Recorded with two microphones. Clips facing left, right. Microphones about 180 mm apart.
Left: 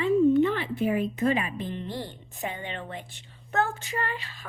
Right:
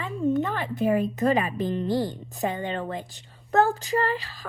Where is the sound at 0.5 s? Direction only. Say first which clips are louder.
Right 2 dB; 45° right (ahead or behind).